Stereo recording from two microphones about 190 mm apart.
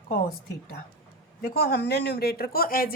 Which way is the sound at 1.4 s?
55° left (ahead or behind).